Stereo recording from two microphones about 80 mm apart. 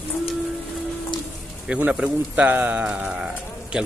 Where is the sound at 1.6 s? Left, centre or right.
Centre.